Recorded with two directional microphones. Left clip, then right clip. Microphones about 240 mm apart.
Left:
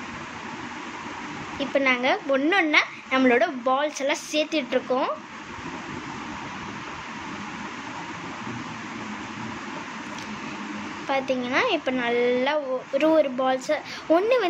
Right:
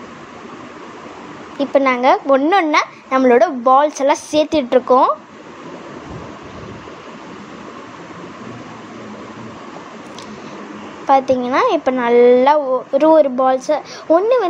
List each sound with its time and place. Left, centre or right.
1.6 s a woman's voice: right
11.1 s a woman's voice: right